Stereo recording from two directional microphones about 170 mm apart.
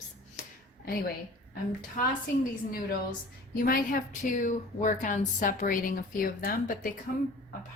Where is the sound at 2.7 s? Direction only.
60° left (ahead or behind).